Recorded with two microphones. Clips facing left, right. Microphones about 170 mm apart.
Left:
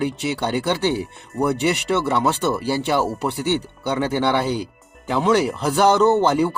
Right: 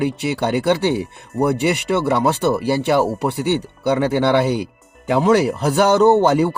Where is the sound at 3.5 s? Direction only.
55° right (ahead or behind).